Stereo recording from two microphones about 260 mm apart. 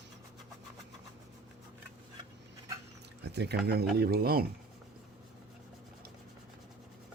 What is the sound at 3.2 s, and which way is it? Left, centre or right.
Speech, right.